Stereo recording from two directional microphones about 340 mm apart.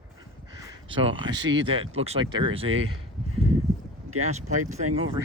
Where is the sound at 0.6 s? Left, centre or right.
Centre.